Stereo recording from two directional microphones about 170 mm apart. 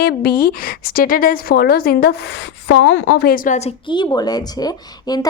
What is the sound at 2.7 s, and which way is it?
A woman's voice, 90° left.